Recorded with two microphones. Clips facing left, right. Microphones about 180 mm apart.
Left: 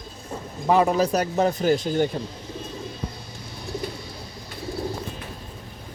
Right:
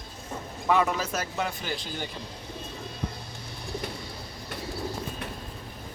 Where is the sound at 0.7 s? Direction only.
35° left (ahead or behind).